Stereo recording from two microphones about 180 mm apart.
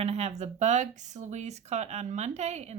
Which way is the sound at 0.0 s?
35° right (ahead or behind).